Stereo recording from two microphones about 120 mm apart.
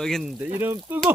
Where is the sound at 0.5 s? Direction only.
20° right (ahead or behind).